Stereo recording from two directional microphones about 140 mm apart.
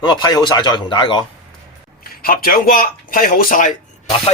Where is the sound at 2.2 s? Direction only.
90° left; by 3.7 s 70° left (ahead or behind).